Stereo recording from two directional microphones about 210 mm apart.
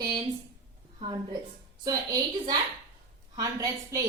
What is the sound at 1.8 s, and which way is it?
A woman's voice, 20° right (ahead or behind).